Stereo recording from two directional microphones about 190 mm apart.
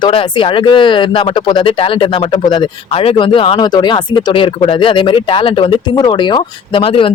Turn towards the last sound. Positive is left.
turn(degrees=30)  # may be behind; listen again after turning